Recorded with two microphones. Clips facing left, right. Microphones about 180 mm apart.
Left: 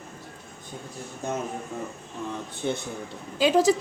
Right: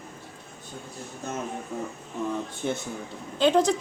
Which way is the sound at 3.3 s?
5° left (ahead or behind).